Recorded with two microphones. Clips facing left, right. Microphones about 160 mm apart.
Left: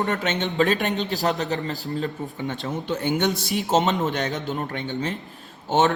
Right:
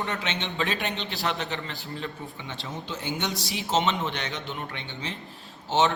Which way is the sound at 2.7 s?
60° left (ahead or behind).